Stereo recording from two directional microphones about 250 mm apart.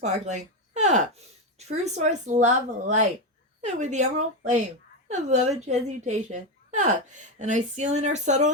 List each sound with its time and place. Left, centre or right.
0.0 s speech: right